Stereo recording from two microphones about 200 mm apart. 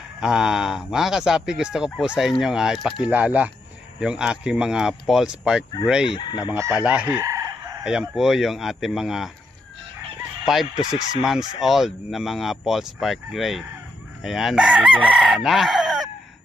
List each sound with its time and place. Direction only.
0.2 s speech: 5° right (ahead or behind)
6.1 s speech: 25° left (ahead or behind)
6.5 s chicken: 15° right (ahead or behind)
7.9 s speech: 5° right (ahead or behind)
10.4 s fowl: centre (ahead or behind)
10.8 s speech: 20° left (ahead or behind)
11.3 s speech: centre (ahead or behind)
15.0 s chicken: centre (ahead or behind)